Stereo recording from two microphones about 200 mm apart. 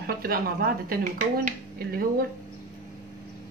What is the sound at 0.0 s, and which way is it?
A woman's voice, 50° right (ahead or behind).